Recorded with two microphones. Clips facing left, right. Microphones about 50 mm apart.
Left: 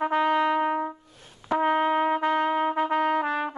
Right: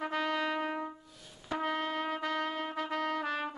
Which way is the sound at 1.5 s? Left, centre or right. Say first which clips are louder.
Left 11 dB; left.